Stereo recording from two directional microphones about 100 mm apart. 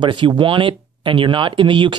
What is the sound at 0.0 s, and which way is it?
Speech, 55° right (ahead or behind).